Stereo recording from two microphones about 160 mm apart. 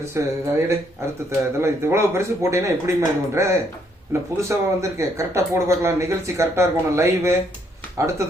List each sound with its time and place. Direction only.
0.0 s speech: 15° right (ahead or behind)